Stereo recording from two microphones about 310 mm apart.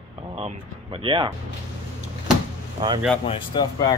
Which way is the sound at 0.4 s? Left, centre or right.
Centre.